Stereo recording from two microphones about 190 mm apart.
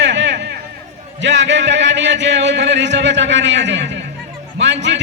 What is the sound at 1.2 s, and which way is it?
A man's voice, 70° right (ahead or behind).